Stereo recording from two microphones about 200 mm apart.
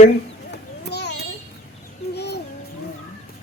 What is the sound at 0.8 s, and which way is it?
Children playing, 55° left (ahead or behind).